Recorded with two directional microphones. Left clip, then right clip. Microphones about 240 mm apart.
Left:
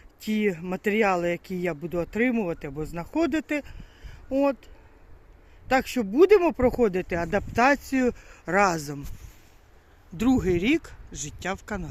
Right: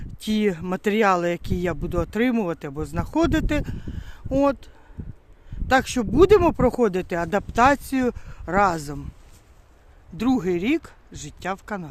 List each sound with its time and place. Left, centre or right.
0.2 s speech: centre
5.6 s speech: centre
10.2 s speech: centre
10.8 s a sound: centre
11.4 s speech: centre